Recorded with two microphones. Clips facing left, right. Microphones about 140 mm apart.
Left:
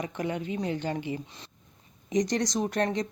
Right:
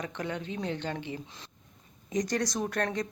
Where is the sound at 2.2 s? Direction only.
20° left (ahead or behind).